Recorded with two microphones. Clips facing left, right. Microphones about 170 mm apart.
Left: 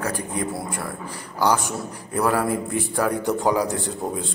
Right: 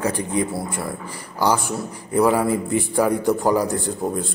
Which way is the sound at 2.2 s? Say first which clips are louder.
Right 4 dB; 15° right (ahead or behind).